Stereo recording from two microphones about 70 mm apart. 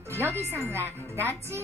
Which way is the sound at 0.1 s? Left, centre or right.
Right.